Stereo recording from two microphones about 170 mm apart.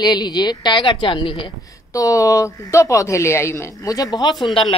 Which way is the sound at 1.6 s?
20° left (ahead or behind).